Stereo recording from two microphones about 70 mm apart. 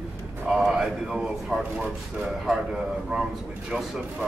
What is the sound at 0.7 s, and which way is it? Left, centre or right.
A man's voice, centre.